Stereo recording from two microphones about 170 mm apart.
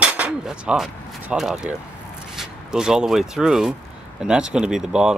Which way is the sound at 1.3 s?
5° right (ahead or behind).